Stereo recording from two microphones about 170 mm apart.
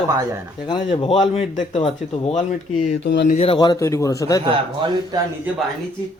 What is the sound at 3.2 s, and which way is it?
A man's voice, 40° left (ahead or behind).